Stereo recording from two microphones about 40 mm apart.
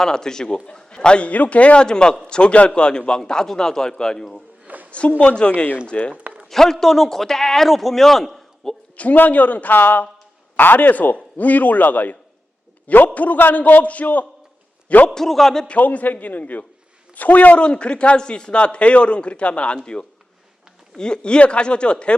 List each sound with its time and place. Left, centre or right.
0.0 s a man's voice: centre
1.3 s a man's voice: left; by 4.4 s centre
4.6 s a sound: right
4.9 s a man's voice: left
6.5 s a man's voice: centre
9.0 s a man's voice: left
13.1 s a man's voice: left
15.1 s a man's voice: centre
15.8 s a man's voice: left